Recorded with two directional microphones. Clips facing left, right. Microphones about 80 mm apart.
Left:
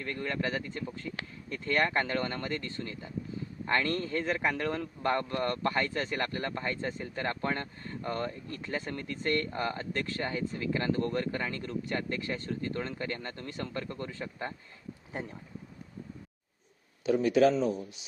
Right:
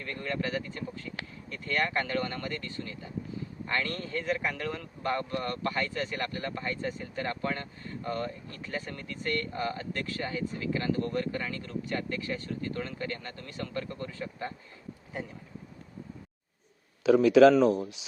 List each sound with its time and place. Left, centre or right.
0.0 s speech: left
17.0 s speech: right